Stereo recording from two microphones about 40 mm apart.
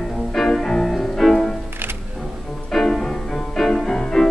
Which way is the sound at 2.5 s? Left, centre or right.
Centre.